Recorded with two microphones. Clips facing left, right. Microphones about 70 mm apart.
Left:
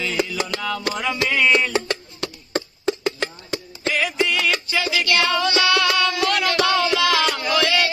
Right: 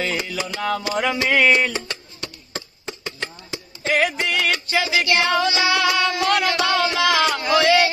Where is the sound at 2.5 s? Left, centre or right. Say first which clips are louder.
Left 13 dB; left.